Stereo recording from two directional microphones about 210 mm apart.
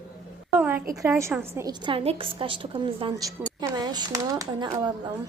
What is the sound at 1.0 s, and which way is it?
A woman's voice, 15° right (ahead or behind).